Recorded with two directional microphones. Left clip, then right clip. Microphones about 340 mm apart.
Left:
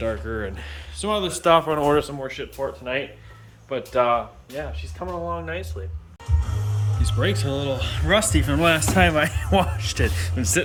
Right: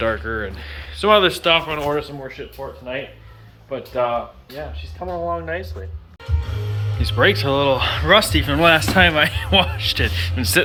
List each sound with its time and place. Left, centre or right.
0.0 s speech: centre
1.5 s speech: left
2.2 s speech: centre
5.3 s speech: centre
7.0 s speech: centre